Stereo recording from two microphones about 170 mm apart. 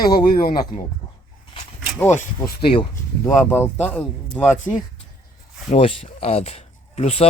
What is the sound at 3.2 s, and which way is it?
A man's voice, 15° left (ahead or behind).